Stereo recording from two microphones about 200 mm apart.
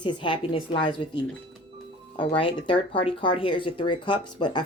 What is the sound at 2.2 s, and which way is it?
Speech, 25° left (ahead or behind).